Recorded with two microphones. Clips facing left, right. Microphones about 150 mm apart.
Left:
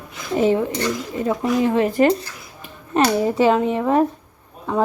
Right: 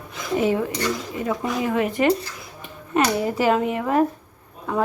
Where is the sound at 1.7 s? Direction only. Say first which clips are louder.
Left 2 dB; 30° left (ahead or behind).